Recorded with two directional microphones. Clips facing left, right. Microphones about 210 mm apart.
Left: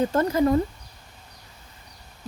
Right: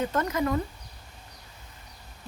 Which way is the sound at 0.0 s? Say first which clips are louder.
Left 6 dB; 30° left (ahead or behind).